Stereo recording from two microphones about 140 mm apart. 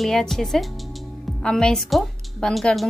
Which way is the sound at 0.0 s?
Centre (ahead or behind).